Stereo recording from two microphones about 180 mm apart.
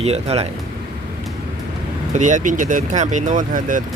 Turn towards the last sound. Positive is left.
turn(degrees=-45)  # may be behind; listen again after turning